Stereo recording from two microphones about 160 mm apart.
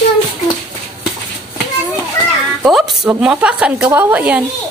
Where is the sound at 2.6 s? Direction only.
Centre (ahead or behind).